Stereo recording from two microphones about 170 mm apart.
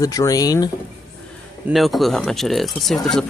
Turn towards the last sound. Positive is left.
turn(degrees=0)  # may be behind; listen again after turning